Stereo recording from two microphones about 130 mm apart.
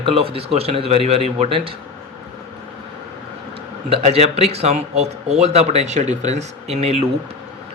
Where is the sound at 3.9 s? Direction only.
55° right (ahead or behind).